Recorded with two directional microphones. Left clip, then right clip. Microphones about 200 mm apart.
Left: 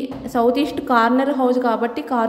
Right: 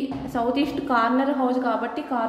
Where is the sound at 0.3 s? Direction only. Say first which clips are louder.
Left 7 dB; 25° left (ahead or behind).